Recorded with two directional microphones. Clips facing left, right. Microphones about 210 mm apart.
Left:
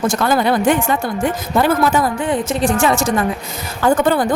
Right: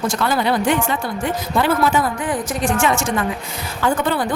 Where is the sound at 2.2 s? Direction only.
25° left (ahead or behind).